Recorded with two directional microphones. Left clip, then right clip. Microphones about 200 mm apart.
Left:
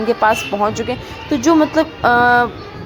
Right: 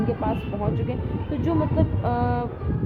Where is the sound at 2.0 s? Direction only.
25° left (ahead or behind).